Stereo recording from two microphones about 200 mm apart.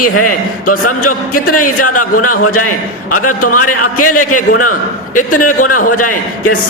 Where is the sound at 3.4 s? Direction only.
90° left.